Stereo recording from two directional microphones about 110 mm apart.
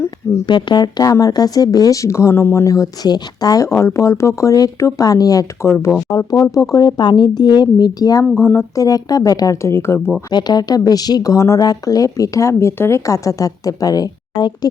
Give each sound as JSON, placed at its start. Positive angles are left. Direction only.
{"t": 0.4, "sound": "speech", "side_deg": 40}
{"t": 3.7, "sound": "speech", "side_deg": 25}
{"t": 8.2, "sound": "speech", "side_deg": 20}
{"t": 10.2, "sound": "speech", "side_deg": 35}